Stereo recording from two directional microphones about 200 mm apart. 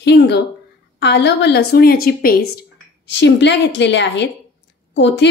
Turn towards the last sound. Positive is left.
turn(degrees=60)  # may be behind; listen again after turning